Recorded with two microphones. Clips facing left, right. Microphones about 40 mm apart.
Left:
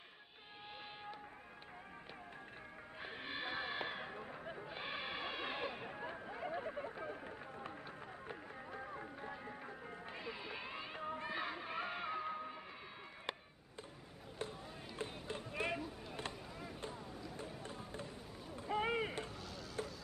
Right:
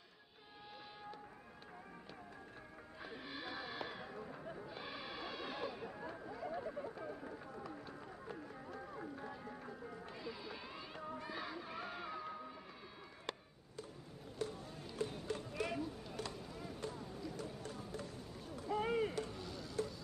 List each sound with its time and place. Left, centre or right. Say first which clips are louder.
3.0 s a sound: left 3 dB; left
4.6 s music: left 3 dB; left
7.1 s run: even; left
8.3 s music: right 1 dB; left
11.0 s music: left 2 dB; left
11.2 s music: left 3 dB; left
13.3 s a sound: left 1 dB; left
14.4 s music: right 2 dB; left
16.3 s a sound: right 1 dB; centre
16.8 s boat: right 3 dB; centre
17.1 s music: right 2 dB; centre
17.5 s music: right 1 dB; left
18.6 s run: right 1 dB; left
19.3 s vehicle: right 2 dB; centre